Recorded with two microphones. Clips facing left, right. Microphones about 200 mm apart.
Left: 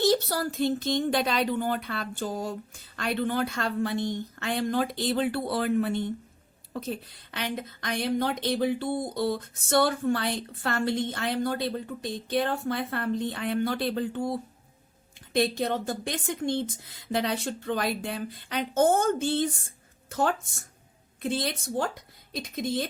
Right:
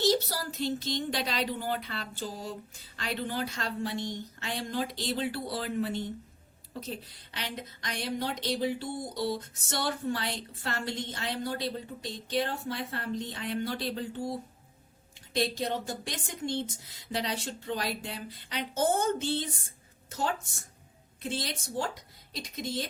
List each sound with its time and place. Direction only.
0.0 s a woman's voice: 55° left (ahead or behind)